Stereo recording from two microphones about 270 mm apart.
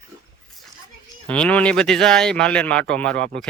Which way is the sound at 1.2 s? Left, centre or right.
Centre.